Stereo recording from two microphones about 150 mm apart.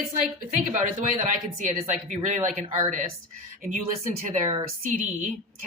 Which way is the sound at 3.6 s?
55° right (ahead or behind).